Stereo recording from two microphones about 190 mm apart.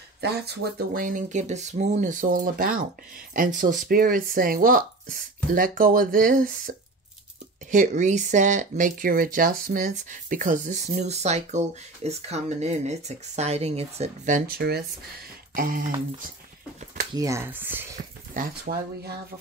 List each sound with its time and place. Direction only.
0.2 s speech: 60° right (ahead or behind)
7.7 s speech: 40° right (ahead or behind)
15.5 s speech: 45° right (ahead or behind)
17.1 s speech: 15° right (ahead or behind)
18.4 s speech: 45° right (ahead or behind)